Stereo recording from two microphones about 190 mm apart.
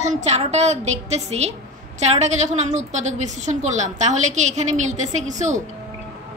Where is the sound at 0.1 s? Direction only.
35° right (ahead or behind).